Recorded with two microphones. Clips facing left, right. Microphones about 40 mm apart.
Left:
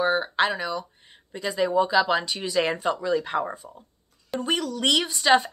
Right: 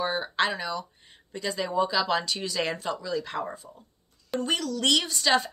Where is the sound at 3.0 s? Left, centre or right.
Left.